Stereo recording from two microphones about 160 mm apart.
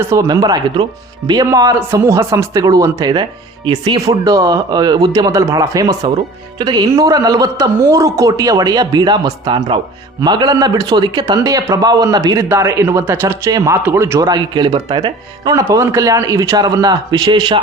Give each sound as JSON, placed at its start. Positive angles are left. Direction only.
{"t": 0.0, "sound": "a man's voice", "side_deg": -15}